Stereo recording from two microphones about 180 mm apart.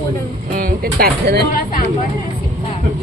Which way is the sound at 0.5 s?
55° right (ahead or behind).